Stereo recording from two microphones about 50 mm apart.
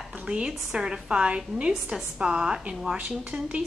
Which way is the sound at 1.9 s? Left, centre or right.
Centre.